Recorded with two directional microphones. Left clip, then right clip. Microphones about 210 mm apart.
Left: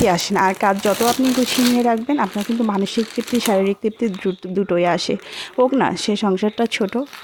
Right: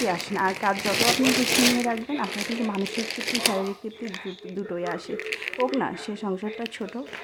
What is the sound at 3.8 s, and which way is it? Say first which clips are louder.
A woman's voice: left 13 dB; 30° left (ahead or behind).